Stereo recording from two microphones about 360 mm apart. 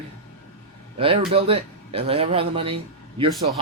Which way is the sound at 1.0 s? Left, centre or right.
Centre.